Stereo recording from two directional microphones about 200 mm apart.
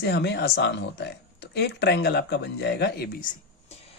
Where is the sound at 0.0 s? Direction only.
55° left (ahead or behind).